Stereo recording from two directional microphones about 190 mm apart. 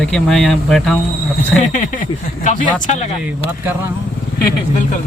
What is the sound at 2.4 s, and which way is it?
Speech, 40° left (ahead or behind).